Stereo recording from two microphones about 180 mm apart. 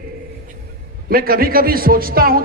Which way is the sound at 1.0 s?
55° right (ahead or behind).